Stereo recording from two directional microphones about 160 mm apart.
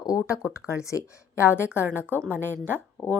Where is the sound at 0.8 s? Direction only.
20° left (ahead or behind).